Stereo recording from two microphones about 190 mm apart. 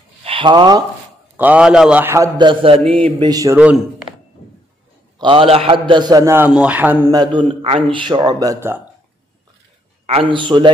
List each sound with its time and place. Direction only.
0.2 s speech: 30° right (ahead or behind)
1.3 s a man's voice: 10° right (ahead or behind)
3.5 s a man's voice: 5° right (ahead or behind)
5.2 s a man's voice: 25° right (ahead or behind); by 7.1 s 10° right (ahead or behind)
7.1 s a man's voice: 25° right (ahead or behind)
10.0 s a man's voice: 30° right (ahead or behind)